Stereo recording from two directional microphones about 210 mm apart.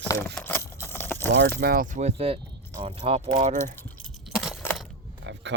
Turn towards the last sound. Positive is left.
turn(degrees=-60)  # may be behind; listen again after turning